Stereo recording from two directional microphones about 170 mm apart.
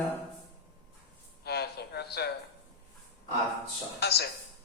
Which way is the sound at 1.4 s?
70° left (ahead or behind).